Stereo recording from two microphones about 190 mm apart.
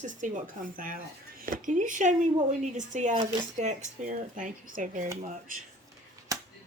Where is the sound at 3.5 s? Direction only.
40° right (ahead or behind).